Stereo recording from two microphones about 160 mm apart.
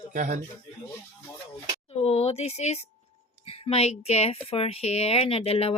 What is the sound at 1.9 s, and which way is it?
Speech, 40° left (ahead or behind).